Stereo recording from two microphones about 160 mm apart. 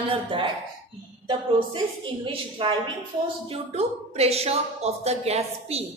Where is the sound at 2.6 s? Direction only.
35° right (ahead or behind).